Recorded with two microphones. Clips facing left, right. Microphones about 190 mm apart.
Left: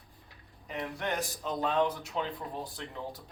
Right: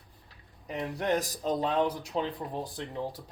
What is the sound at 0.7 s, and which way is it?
Speech, 35° right (ahead or behind).